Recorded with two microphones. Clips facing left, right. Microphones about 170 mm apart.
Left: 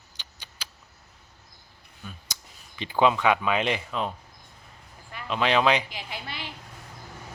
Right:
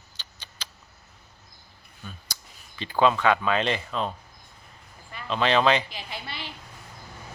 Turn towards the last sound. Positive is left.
turn(degrees=15)  # may be behind; listen again after turning